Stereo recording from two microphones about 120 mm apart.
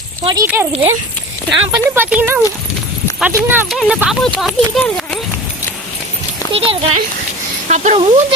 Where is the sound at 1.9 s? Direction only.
15° right (ahead or behind).